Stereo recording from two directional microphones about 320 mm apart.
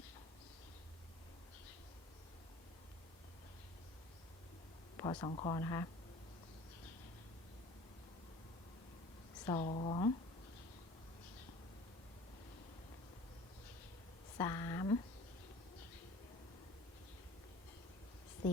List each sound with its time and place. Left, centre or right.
4.9 s speech: centre
9.5 s speech: centre
14.3 s speech: centre